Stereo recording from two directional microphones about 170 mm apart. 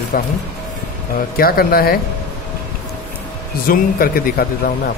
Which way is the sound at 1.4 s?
60° left (ahead or behind).